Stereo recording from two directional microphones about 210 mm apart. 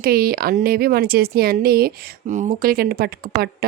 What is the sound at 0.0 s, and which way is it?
Speech, 45° right (ahead or behind).